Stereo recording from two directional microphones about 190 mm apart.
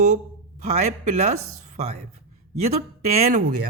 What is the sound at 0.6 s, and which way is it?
A man's voice, 40° right (ahead or behind).